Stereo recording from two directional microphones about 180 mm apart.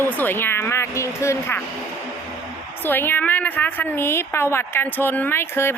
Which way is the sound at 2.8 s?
10° left (ahead or behind).